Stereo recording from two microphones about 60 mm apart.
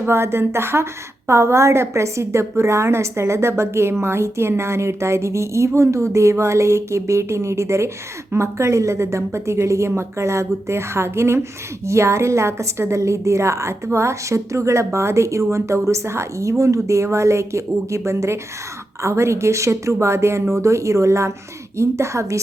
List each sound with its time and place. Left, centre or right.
0.1 s a woman's voice: right